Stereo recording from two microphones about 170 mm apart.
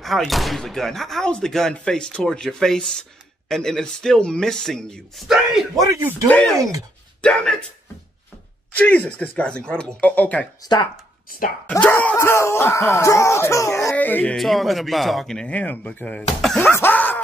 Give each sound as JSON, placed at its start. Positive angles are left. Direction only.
{"t": 0.0, "sound": "speech", "side_deg": 0}
{"t": 5.8, "sound": "speech", "side_deg": -20}
{"t": 6.2, "sound": "speech", "side_deg": 10}
{"t": 8.7, "sound": "speech", "side_deg": 10}
{"t": 10.6, "sound": "speech", "side_deg": 25}
{"t": 11.2, "sound": "speech", "side_deg": 55}
{"t": 11.7, "sound": "speech", "side_deg": 10}
{"t": 16.7, "sound": "a sound", "side_deg": 10}